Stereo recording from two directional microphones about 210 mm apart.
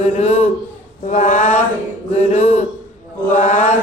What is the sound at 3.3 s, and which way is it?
Mantra, 35° left (ahead or behind).